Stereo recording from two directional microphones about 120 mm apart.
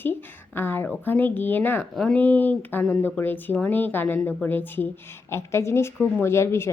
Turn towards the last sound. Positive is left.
turn(degrees=20)  # may be behind; listen again after turning